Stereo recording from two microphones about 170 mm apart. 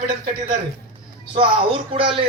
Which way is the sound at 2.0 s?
30° right (ahead or behind).